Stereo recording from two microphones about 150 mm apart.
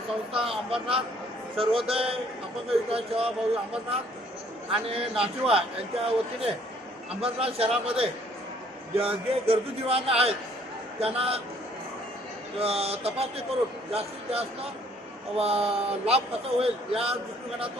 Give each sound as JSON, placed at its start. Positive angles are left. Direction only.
{"t": 0.4, "sound": "a man's voice", "side_deg": -40}
{"t": 7.2, "sound": "a man's voice", "side_deg": -40}
{"t": 12.5, "sound": "a man's voice", "side_deg": -40}